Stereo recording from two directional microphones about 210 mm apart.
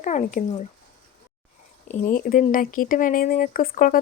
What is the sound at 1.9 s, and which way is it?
Speech, 40° left (ahead or behind).